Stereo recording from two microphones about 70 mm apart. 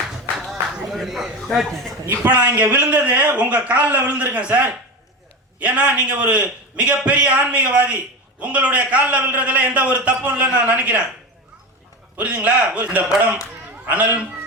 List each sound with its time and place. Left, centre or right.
0.3 s a sound: centre
2.0 s a man's voice: right
12.1 s a man's voice: right